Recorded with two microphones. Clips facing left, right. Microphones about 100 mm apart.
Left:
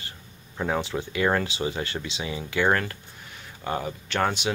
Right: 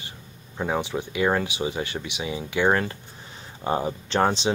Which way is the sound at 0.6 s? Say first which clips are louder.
Right 1 dB; 15° right (ahead or behind).